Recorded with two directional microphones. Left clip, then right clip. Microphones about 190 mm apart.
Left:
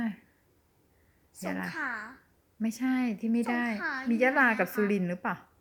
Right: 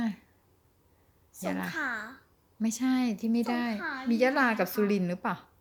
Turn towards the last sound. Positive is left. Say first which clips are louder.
# right 1 dB
turn(degrees=0)  # may be behind; listen again after turning